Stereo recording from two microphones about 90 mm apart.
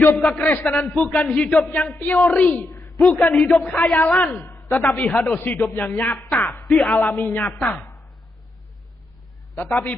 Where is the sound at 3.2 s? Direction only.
Centre (ahead or behind).